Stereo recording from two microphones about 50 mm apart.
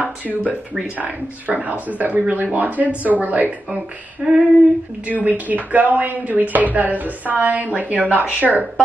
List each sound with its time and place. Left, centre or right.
0.0 s speech: right
4.2 s female singing: centre
5.0 s speech: right